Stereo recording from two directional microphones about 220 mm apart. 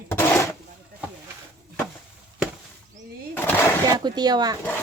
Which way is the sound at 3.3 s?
10° left (ahead or behind).